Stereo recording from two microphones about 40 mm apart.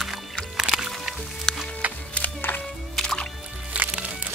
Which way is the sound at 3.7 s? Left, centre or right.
Right.